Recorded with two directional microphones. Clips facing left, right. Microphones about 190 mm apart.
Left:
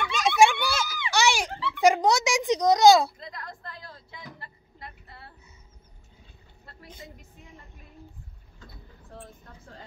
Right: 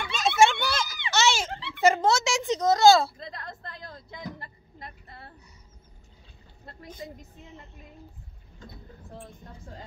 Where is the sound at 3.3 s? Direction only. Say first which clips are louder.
Right 1 dB; 25° right (ahead or behind).